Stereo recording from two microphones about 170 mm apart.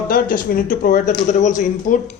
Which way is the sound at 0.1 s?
55° left (ahead or behind).